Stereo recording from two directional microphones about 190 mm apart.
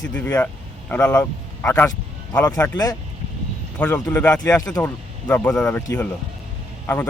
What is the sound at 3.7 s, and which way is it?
Speech, 5° left (ahead or behind).